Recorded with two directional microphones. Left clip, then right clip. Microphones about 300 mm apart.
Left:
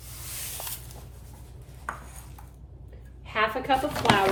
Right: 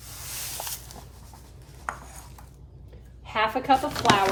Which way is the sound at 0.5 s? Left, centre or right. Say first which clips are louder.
Right 3 dB; centre.